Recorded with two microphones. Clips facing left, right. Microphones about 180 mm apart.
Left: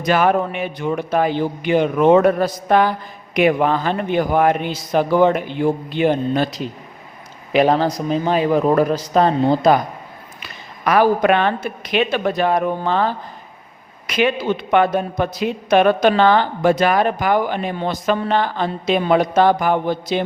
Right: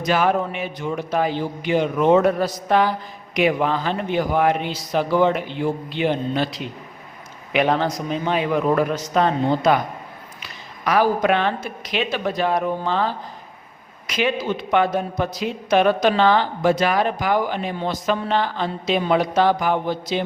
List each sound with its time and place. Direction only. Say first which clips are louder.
0.0 s a woman's voice: left 3 dB; 55° left (ahead or behind); by 9.8 s 35° left (ahead or behind)
10.4 s a woman's voice: left 4 dB; 55° left (ahead or behind)